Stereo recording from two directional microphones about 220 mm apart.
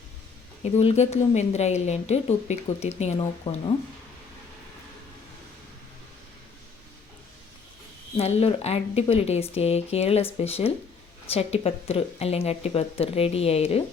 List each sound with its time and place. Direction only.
0.6 s a woman's voice: 30° left (ahead or behind)
8.1 s speech: 30° left (ahead or behind)